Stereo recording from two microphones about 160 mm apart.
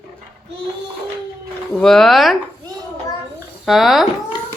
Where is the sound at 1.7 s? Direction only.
Centre (ahead or behind).